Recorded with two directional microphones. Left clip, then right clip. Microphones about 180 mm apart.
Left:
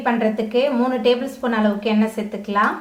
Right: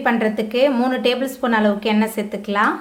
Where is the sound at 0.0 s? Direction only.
35° right (ahead or behind).